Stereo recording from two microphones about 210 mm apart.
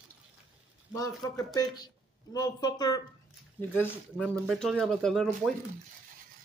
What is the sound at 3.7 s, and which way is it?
Speech, 5° left (ahead or behind).